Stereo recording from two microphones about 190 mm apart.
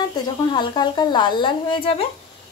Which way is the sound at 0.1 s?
20° left (ahead or behind).